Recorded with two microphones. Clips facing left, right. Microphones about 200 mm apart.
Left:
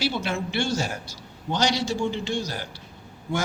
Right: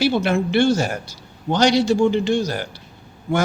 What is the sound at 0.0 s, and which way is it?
A man's voice, 60° right (ahead or behind).